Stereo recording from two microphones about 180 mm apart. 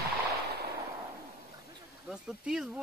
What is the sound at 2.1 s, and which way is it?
Speech, 5° right (ahead or behind).